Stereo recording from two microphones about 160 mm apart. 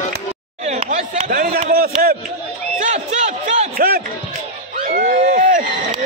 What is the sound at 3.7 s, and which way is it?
Speech, 65° right (ahead or behind).